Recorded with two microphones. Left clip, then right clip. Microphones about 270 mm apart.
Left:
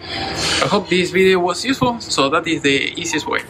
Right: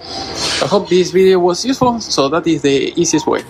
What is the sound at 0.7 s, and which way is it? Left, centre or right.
Speech, centre.